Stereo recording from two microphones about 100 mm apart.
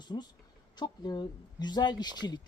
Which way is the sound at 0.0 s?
45° left (ahead or behind).